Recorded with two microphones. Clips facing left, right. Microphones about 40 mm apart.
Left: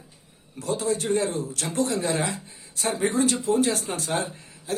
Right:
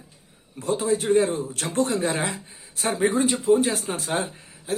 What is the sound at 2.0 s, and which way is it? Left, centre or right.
Speech, right.